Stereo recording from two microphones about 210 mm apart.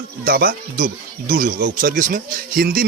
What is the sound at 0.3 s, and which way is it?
Speech, 45° right (ahead or behind).